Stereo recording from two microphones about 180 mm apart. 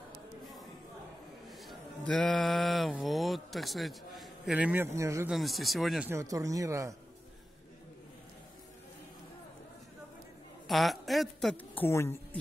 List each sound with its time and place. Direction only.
1.5 s mantra: centre (ahead or behind); by 5.3 s 15° right (ahead or behind)
5.3 s speech: centre (ahead or behind)
6.0 s speech: 15° right (ahead or behind)
10.7 s a woman's voice: centre (ahead or behind)